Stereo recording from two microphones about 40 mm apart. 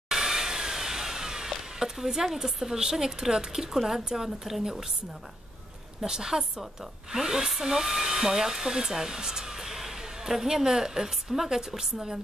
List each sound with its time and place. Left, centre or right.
0.1 s a sound: centre
1.5 s speech: centre
5.9 s speech: centre